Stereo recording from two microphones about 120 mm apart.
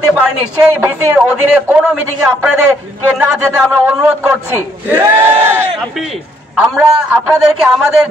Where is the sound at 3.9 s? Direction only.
20° right (ahead or behind).